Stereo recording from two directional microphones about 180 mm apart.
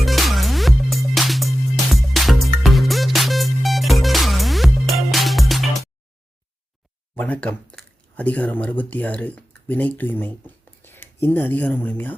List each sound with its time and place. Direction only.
0.0 s music: centre (ahead or behind)
7.2 s speech: 5° left (ahead or behind)